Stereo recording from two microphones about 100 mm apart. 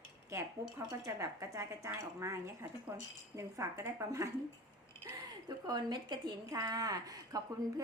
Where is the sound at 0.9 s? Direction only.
30° right (ahead or behind).